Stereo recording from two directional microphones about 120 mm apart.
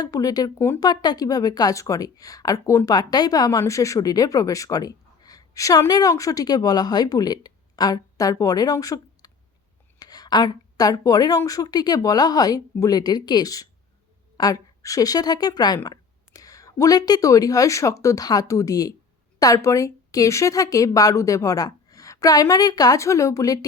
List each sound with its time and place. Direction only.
0.0 s a woman's voice: 30° left (ahead or behind)